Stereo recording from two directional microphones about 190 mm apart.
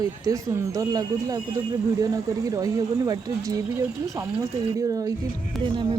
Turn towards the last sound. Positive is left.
turn(degrees=-25)  # may be behind; listen again after turning